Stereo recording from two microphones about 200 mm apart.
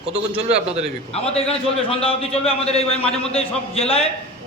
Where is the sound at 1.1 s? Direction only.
30° left (ahead or behind).